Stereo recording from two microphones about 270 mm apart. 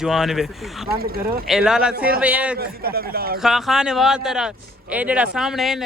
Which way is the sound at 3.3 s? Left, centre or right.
Centre.